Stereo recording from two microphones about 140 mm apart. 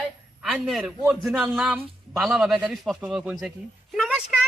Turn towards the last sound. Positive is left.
turn(degrees=-5)  # may be behind; listen again after turning